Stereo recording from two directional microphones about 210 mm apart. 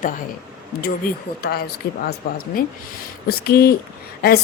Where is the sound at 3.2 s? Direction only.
50° left (ahead or behind).